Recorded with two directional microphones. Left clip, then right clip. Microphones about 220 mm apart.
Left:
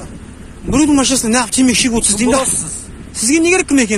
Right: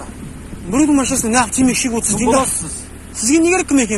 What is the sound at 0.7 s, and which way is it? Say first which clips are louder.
Speech: left 2 dB; 55° left (ahead or behind).